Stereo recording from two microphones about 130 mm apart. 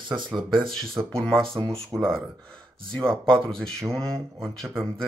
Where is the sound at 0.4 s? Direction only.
40° right (ahead or behind).